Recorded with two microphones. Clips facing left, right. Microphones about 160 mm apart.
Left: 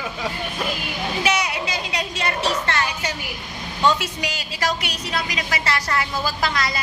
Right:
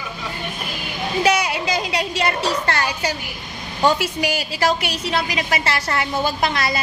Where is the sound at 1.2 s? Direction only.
30° right (ahead or behind).